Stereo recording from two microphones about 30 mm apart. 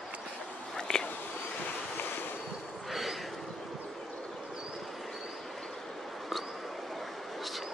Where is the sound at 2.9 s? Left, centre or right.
Centre.